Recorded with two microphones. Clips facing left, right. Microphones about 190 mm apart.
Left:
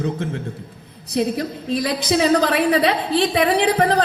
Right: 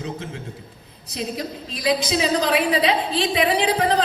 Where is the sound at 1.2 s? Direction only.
60° left (ahead or behind).